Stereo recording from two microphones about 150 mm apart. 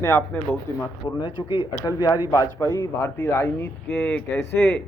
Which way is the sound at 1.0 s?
30° left (ahead or behind).